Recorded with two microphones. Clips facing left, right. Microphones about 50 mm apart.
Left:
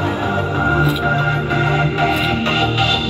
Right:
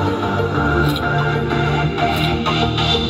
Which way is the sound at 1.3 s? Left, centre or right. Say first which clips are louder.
Left 1 dB; left.